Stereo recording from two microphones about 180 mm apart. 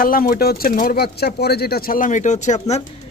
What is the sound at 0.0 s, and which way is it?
Speech, 55° left (ahead or behind).